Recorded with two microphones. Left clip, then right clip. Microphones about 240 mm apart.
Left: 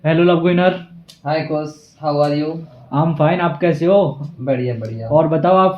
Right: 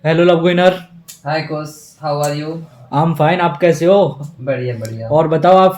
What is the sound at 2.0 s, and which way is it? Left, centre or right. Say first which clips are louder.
Speech: left 2 dB; centre.